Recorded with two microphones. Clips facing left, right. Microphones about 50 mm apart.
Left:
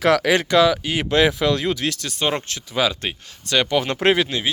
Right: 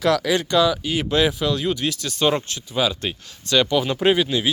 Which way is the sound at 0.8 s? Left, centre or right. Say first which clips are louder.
Left 2 dB; left.